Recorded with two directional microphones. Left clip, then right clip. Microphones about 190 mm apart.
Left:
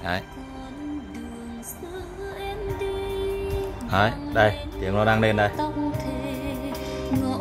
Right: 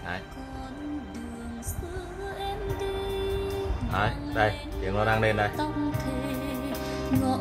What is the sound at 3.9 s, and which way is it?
Speech, 55° left (ahead or behind).